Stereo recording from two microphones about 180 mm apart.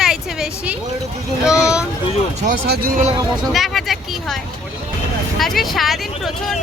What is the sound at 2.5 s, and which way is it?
Speech, 65° right (ahead or behind).